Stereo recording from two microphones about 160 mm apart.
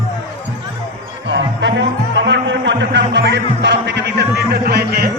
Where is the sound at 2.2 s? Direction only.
90° right.